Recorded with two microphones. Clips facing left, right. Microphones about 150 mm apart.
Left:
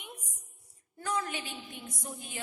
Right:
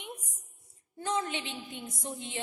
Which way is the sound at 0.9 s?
25° right (ahead or behind).